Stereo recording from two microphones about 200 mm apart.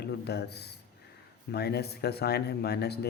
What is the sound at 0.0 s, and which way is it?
Speech, 55° left (ahead or behind).